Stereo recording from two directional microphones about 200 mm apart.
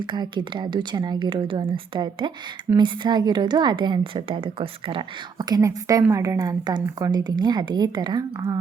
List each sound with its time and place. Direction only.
0.0 s a woman's voice: 25° right (ahead or behind)